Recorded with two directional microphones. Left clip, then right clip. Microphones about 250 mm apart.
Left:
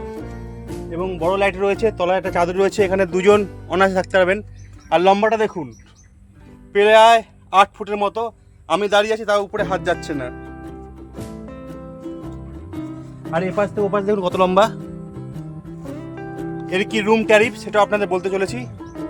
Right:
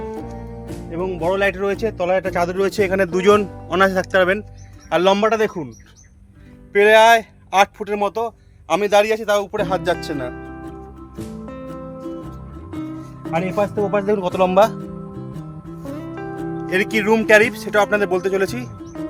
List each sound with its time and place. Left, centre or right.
0.0 s music: centre
0.9 s speech: centre
2.6 s speech: centre
6.7 s a sound: centre
13.4 s speech: centre
14.8 s music: centre